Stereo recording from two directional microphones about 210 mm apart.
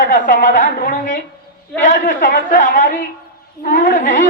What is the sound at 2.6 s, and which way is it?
A woman's voice, 40° left (ahead or behind).